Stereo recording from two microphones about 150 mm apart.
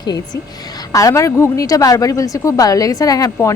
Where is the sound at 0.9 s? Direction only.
20° left (ahead or behind).